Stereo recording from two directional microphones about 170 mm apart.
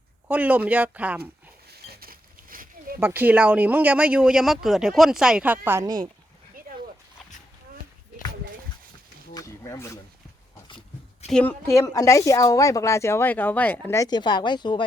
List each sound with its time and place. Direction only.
0.3 s speech: 10° right (ahead or behind)
1.9 s a sound: 60° right (ahead or behind)
3.0 s speech: 10° right (ahead or behind)
9.3 s a sound: 15° left (ahead or behind)
11.3 s speech: 5° left (ahead or behind)
11.9 s speech: 20° left (ahead or behind)